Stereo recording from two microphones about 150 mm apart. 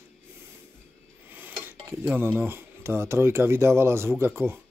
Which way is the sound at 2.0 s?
10° right (ahead or behind).